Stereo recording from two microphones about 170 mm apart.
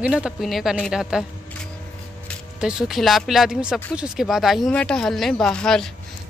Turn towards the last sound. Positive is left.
turn(degrees=5)  # may be behind; listen again after turning